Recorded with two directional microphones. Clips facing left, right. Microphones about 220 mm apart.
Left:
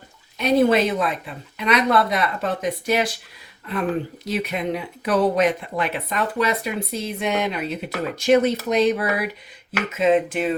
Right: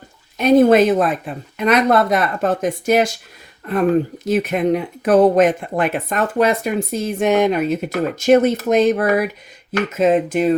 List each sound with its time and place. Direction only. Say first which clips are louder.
0.3 s speech: right 6 dB; 50° right (ahead or behind)